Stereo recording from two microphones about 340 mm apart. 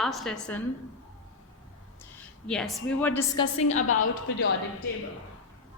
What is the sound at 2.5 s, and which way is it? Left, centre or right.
A woman's voice, centre.